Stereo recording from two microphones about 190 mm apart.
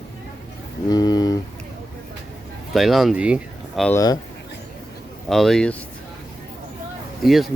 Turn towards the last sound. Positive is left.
turn(degrees=0)  # may be behind; listen again after turning